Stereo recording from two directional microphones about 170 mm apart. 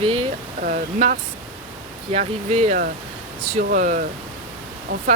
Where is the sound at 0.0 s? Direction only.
35° right (ahead or behind).